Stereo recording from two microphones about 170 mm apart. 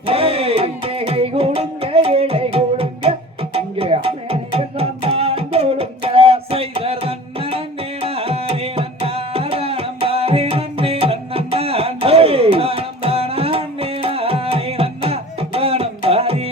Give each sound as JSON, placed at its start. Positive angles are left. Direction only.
{"t": 0.0, "sound": "music", "side_deg": -35}
{"t": 8.0, "sound": "tabla", "side_deg": -35}